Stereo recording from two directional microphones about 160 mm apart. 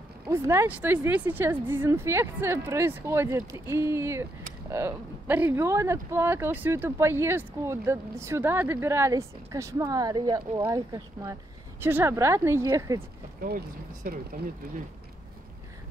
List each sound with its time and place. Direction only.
0.3 s speech: 15° right (ahead or behind)
14.0 s speech: 65° right (ahead or behind)